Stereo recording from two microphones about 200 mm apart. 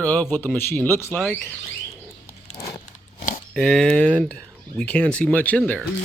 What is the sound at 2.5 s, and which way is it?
Horse, 15° left (ahead or behind).